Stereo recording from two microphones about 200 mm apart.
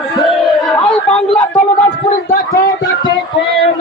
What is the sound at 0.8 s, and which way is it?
Chatter, 5° left (ahead or behind).